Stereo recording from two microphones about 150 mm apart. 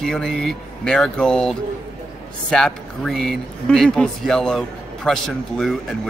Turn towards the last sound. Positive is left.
turn(degrees=0)  # may be behind; listen again after turning